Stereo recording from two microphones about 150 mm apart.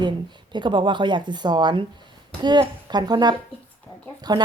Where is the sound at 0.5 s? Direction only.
30° right (ahead or behind).